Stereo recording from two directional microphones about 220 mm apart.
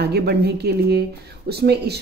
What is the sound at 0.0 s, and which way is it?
Speech, 45° right (ahead or behind).